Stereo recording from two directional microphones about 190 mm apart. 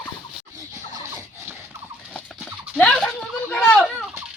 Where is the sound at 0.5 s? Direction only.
20° right (ahead or behind).